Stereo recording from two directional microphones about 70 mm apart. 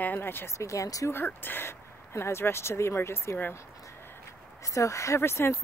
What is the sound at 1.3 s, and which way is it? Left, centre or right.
Speech, left.